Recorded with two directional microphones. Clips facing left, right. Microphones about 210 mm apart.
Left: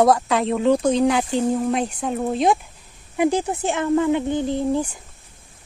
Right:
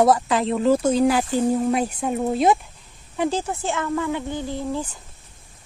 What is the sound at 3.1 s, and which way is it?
Speech, 15° left (ahead or behind).